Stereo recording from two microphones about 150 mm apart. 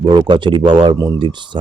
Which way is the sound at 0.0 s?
30° right (ahead or behind).